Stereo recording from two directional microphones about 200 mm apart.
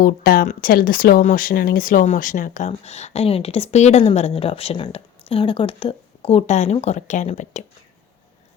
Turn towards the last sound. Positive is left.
turn(degrees=35)  # may be behind; listen again after turning